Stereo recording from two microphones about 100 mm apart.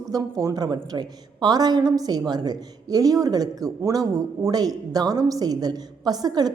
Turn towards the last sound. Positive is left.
turn(degrees=-40)  # may be behind; listen again after turning